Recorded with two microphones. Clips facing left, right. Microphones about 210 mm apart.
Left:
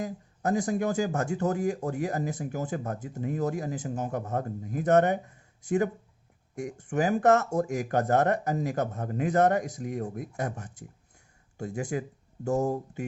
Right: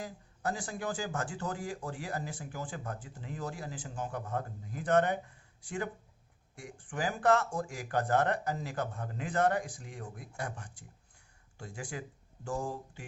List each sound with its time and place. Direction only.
0.0 s speech: 45° left (ahead or behind)